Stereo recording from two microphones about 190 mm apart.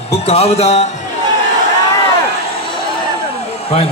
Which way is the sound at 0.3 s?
35° left (ahead or behind).